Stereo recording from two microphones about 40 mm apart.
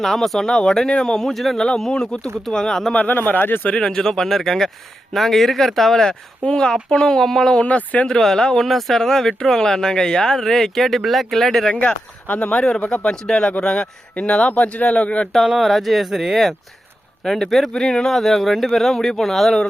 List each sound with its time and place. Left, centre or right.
0.0 s speech: centre
0.4 s speech: centre
1.3 s speech: centre
1.5 s speech: left
2.9 s speech: left
3.2 s speech: left
3.8 s speech: centre
6.4 s speech: left; by 11.6 s centre
11.7 s speech: left
13.1 s speech: centre
13.6 s speech: left
15.4 s speech: centre
17.2 s speech: centre
18.1 s speech: centre